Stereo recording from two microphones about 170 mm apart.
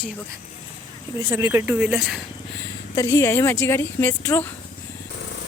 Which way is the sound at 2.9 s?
15° left (ahead or behind).